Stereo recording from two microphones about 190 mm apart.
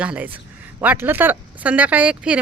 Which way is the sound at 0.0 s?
5° right (ahead or behind).